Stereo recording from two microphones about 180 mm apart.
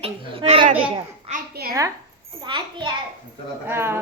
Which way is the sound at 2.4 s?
25° right (ahead or behind).